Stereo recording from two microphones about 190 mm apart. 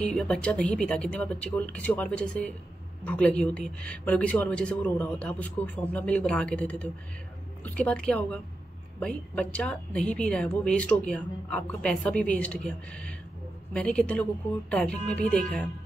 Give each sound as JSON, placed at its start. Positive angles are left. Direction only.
{"t": 0.0, "sound": "a woman's voice", "side_deg": 5}